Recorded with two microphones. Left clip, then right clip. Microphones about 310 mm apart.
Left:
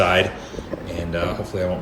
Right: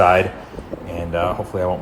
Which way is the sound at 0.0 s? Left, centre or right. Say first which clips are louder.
Right 4 dB; centre.